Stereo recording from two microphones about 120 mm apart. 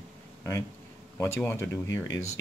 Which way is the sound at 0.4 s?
25° left (ahead or behind).